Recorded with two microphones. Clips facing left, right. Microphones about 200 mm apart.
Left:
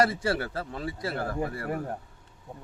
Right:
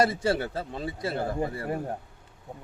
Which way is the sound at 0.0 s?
20° right (ahead or behind).